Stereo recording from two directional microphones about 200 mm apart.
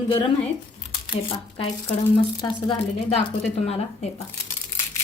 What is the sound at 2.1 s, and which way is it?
A woman's voice, 25° left (ahead or behind).